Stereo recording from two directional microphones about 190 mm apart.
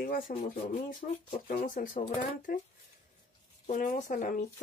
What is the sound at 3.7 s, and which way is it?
Speech, 45° left (ahead or behind).